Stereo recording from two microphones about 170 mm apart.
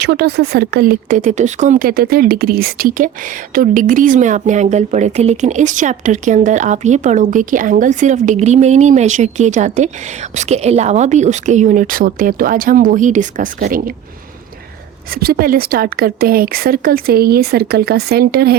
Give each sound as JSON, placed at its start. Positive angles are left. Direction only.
{"t": 0.0, "sound": "speech", "side_deg": -80}
{"t": 15.1, "sound": "speech", "side_deg": -60}